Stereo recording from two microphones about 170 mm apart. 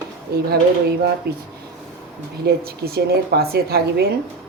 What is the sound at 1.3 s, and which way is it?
Speech, 70° right (ahead or behind).